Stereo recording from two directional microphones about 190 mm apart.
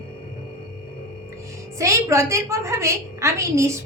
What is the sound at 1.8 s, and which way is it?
A woman's voice, 15° right (ahead or behind).